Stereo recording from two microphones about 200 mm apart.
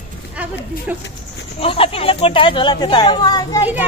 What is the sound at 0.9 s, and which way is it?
Speech, 10° right (ahead or behind).